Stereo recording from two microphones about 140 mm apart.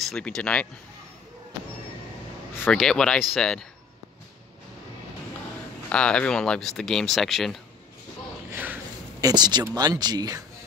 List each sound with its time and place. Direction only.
0.0 s speech: 5° left (ahead or behind)
2.5 s speech: 10° left (ahead or behind)
5.9 s speech: 5° left (ahead or behind)
8.5 s a sound: 15° right (ahead or behind)
9.2 s speech: 30° right (ahead or behind)